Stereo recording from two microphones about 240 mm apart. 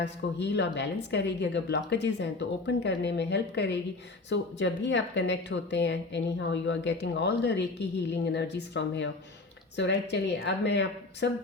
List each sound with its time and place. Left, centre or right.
0.0 s speech: left